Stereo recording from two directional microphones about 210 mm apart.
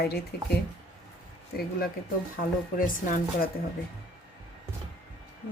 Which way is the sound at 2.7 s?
40° left (ahead or behind).